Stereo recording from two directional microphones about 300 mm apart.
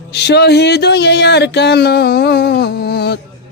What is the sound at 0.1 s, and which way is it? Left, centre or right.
Music, left.